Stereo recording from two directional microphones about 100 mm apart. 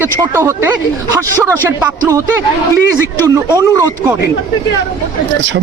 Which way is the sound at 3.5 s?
30° right (ahead or behind).